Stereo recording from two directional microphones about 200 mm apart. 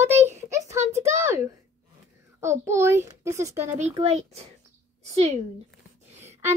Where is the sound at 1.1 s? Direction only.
15° right (ahead or behind).